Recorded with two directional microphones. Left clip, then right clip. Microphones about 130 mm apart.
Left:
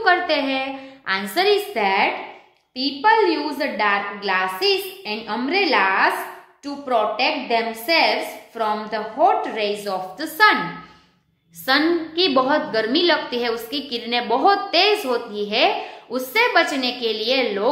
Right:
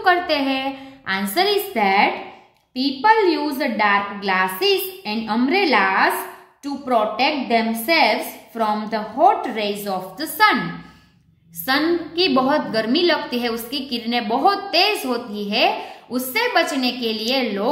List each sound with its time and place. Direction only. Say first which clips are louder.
0.0 s a woman's voice: even; 35° right (ahead or behind)
11.7 s a woman's voice: left 1 dB; 30° right (ahead or behind)